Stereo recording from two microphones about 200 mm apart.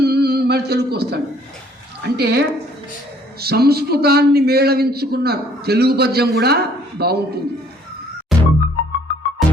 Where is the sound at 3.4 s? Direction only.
50° right (ahead or behind).